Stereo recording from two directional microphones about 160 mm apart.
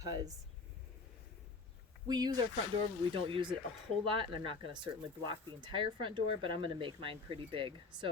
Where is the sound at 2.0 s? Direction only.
25° right (ahead or behind).